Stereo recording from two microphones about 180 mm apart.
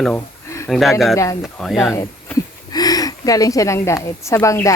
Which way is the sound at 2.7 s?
20° left (ahead or behind).